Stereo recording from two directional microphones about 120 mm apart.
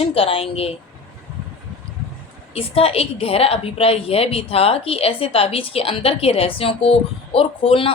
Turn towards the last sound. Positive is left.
turn(degrees=50)  # may be behind; listen again after turning